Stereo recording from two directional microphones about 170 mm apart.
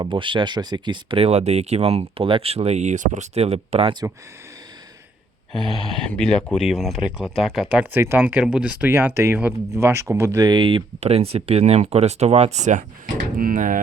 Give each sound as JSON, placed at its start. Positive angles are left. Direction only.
{"t": 0.0, "sound": "speech", "side_deg": -30}
{"t": 6.1, "sound": "speech", "side_deg": 5}